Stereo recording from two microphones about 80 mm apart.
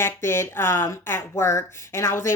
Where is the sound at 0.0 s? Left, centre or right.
Left.